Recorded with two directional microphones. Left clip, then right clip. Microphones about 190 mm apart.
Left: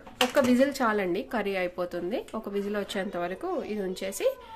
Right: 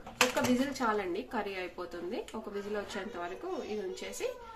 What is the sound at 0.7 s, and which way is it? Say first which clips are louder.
Speech: left 5 dB; 60° left (ahead or behind).